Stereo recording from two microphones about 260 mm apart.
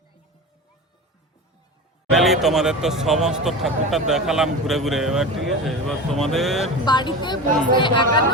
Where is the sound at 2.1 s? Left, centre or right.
Centre.